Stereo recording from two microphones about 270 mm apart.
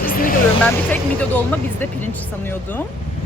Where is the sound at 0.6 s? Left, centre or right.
Centre.